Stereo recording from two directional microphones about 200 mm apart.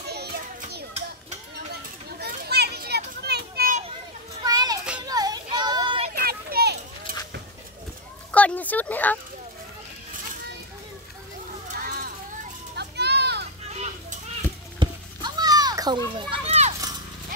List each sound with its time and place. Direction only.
0.1 s children playing: 55° right (ahead or behind)
2.1 s children playing: 55° right (ahead or behind)
4.4 s children playing: 20° right (ahead or behind)
5.0 s child singing: 20° right (ahead or behind)
6.1 s children playing: 50° right (ahead or behind)
8.3 s speech: 5° left (ahead or behind)
12.7 s children playing: 55° right (ahead or behind)
13.7 s children playing: 35° right (ahead or behind)
14.8 s children playing: 20° right (ahead or behind)